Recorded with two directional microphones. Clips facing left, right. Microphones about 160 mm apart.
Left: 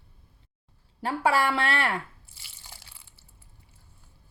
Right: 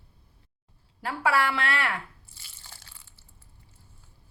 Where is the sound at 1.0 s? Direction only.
25° left (ahead or behind).